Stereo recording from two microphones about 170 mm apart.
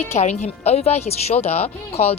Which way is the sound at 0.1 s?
40° left (ahead or behind).